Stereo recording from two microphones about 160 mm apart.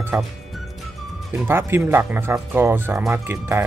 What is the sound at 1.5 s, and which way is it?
Speech, 15° right (ahead or behind).